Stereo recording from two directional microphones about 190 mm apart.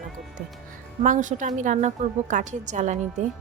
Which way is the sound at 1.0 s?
40° right (ahead or behind).